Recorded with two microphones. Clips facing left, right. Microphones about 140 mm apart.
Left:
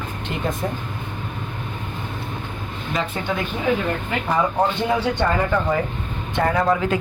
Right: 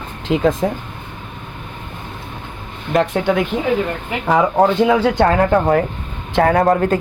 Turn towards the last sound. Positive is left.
turn(degrees=-50)  # may be behind; listen again after turning